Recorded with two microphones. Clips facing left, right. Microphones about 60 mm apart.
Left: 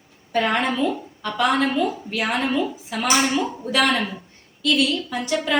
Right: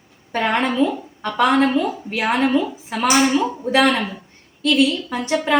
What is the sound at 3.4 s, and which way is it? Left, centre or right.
A woman's voice, right.